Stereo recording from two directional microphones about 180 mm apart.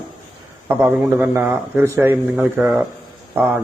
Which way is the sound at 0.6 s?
10° right (ahead or behind).